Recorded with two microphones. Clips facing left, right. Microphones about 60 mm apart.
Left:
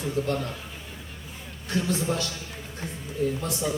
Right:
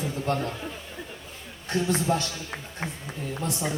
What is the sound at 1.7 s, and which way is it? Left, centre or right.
Speech, right.